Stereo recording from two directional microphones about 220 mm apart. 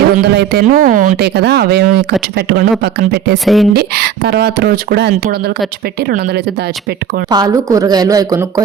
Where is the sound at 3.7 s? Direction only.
45° right (ahead or behind).